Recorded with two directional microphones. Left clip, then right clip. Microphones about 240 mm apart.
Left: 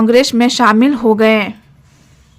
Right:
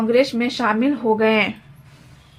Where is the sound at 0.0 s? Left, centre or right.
Left.